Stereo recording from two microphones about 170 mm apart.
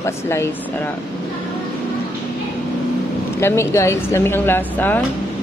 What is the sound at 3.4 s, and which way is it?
A woman's voice, 15° left (ahead or behind).